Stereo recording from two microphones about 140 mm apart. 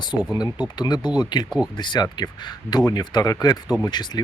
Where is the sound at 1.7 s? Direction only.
35° left (ahead or behind).